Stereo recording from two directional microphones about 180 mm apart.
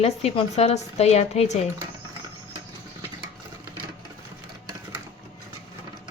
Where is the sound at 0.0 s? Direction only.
35° left (ahead or behind).